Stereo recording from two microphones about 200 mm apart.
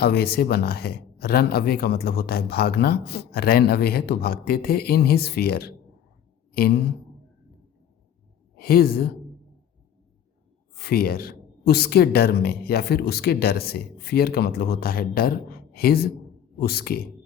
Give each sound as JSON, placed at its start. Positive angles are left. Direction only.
{"t": 0.0, "sound": "speech", "side_deg": 50}
{"t": 8.5, "sound": "a woman's voice", "side_deg": 50}
{"t": 10.8, "sound": "speech", "side_deg": 50}